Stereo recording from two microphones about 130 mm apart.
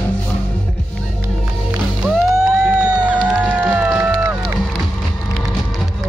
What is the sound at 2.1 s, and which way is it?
Music, 5° right (ahead or behind).